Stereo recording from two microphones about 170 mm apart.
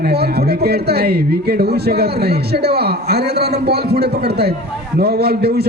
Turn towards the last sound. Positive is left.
turn(degrees=-70)  # may be behind; listen again after turning